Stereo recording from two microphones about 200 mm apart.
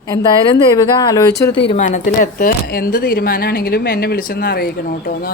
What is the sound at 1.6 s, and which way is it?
Speech, 40° left (ahead or behind).